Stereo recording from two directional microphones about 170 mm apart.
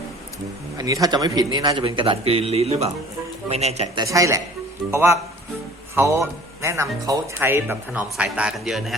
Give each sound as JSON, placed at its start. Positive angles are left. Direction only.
{"t": 0.8, "sound": "a man's voice", "side_deg": -20}
{"t": 3.9, "sound": "a man's voice", "side_deg": -20}
{"t": 5.9, "sound": "speech", "side_deg": -15}